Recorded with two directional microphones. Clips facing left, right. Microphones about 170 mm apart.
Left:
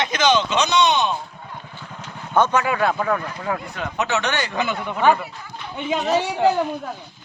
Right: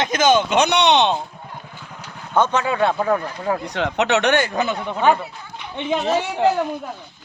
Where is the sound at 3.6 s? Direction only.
85° right; by 4.5 s 60° right (ahead or behind).